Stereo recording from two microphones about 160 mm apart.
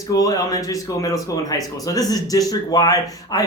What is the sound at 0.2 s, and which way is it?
Speech, 20° left (ahead or behind).